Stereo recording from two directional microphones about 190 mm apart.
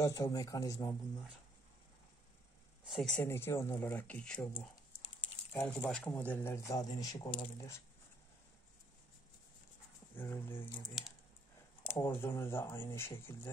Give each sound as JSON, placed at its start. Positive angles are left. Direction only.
{"t": 0.0, "sound": "speech", "side_deg": 15}
{"t": 2.8, "sound": "speech", "side_deg": 0}
{"t": 10.1, "sound": "speech", "side_deg": 10}
{"t": 12.0, "sound": "speech", "side_deg": 10}